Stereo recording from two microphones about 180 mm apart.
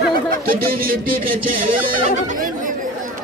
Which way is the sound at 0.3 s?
55° right (ahead or behind).